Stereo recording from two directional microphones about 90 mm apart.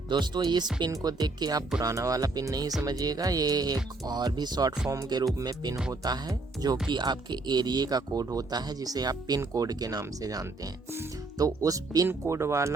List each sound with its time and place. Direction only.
0.1 s speech: 55° right (ahead or behind); by 12.7 s 30° right (ahead or behind)